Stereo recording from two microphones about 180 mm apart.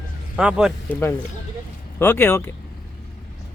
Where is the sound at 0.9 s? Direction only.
15° left (ahead or behind).